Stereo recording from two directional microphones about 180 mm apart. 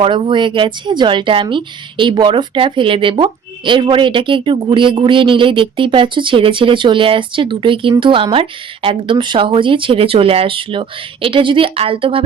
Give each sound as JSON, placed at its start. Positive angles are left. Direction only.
{"t": 0.0, "sound": "a woman's voice", "side_deg": -30}